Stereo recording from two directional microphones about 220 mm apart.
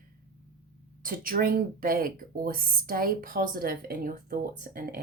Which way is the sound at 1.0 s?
40° right (ahead or behind).